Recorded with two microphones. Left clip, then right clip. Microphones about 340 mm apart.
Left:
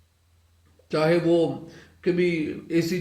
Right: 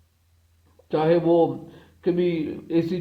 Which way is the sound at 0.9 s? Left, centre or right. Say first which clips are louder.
Right 1 dB; centre.